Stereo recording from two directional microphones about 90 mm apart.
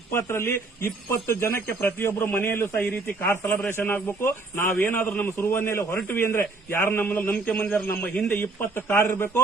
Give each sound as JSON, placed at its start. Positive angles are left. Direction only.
{"t": 0.1, "sound": "a man's voice", "side_deg": 30}